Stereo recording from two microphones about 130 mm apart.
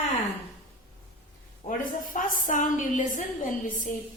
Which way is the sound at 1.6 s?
90° left.